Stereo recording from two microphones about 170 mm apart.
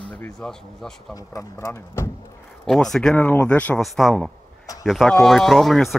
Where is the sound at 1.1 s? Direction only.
20° left (ahead or behind).